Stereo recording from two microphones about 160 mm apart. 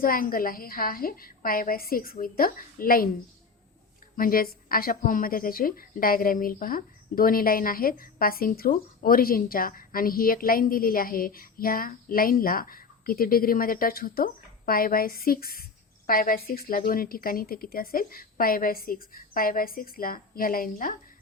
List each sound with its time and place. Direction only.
0.0 s a woman's voice: 65° left (ahead or behind)
4.2 s a woman's voice: 65° left (ahead or behind)